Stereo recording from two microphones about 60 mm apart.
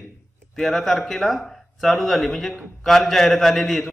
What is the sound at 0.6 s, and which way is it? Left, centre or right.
Speech, centre.